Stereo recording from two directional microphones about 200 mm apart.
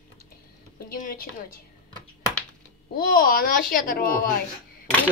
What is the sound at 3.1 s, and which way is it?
A woman's voice, 45° left (ahead or behind).